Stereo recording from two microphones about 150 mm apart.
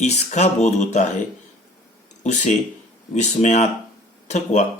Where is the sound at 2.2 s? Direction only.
55° left (ahead or behind).